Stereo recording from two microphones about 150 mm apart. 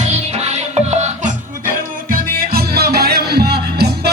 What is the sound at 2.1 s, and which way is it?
Music, 85° right.